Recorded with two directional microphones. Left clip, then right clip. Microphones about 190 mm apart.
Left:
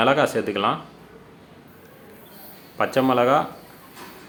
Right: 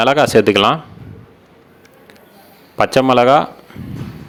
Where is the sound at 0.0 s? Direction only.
45° right (ahead or behind).